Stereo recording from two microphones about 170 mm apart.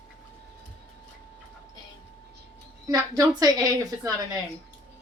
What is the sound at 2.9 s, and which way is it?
A woman's voice, 20° right (ahead or behind).